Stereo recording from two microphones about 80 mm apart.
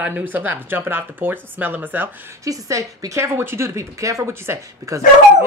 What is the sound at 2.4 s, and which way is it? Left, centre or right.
A woman's voice, right.